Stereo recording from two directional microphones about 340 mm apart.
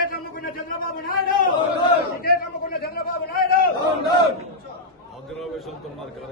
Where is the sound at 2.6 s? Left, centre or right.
Left.